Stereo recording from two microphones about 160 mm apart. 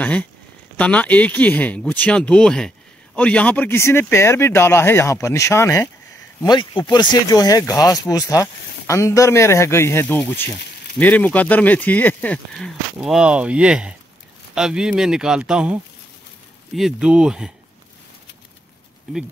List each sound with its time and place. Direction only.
0.0 s speech: 10° left (ahead or behind)
6.4 s speech: 30° left (ahead or behind); by 17.5 s 5° right (ahead or behind)